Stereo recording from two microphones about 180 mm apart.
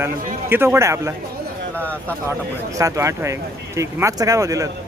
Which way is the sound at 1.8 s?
10° left (ahead or behind).